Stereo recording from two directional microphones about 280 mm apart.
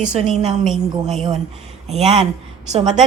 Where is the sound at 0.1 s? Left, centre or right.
Right.